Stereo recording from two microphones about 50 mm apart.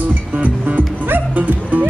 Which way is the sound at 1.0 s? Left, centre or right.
Right.